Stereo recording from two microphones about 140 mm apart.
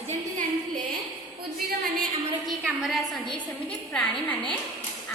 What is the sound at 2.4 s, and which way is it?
A woman's voice, centre (ahead or behind).